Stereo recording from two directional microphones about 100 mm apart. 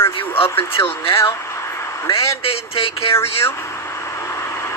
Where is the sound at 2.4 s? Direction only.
80° left.